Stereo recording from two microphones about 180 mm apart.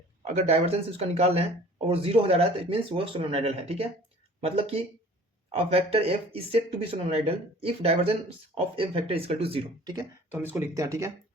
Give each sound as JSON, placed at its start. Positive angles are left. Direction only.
{"t": 0.3, "sound": "speech", "side_deg": -35}
{"t": 10.3, "sound": "speech", "side_deg": -10}